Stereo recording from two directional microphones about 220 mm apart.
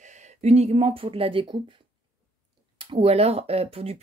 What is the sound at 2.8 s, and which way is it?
Speech, 25° right (ahead or behind).